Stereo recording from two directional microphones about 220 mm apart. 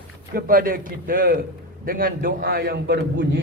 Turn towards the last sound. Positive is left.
turn(degrees=-45)  # may be behind; listen again after turning